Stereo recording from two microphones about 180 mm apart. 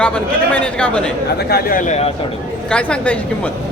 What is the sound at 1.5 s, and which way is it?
Speech, 50° left (ahead or behind).